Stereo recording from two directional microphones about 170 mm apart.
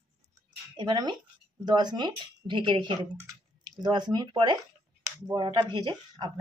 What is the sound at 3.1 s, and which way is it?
Clicking, 20° right (ahead or behind).